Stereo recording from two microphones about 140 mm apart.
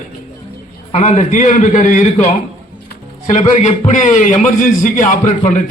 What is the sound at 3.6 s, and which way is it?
A man's voice, 60° left (ahead or behind).